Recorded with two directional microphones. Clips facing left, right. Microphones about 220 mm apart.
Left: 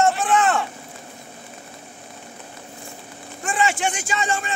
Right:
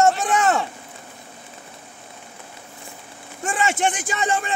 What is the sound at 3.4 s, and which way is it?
Speech, 45° right (ahead or behind).